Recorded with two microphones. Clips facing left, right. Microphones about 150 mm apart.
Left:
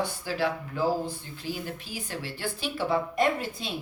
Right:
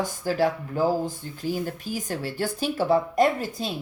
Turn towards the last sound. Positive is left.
turn(degrees=-40)  # may be behind; listen again after turning